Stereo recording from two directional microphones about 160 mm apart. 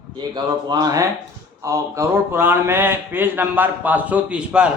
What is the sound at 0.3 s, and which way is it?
A man's voice, 25° right (ahead or behind).